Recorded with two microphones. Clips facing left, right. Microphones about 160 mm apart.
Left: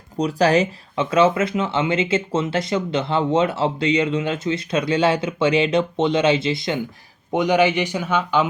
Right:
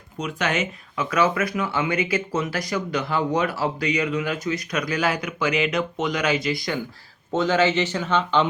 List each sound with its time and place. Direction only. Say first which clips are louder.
0.2 s speech: left 8 dB; 35° left (ahead or behind); by 8.4 s 10° left (ahead or behind)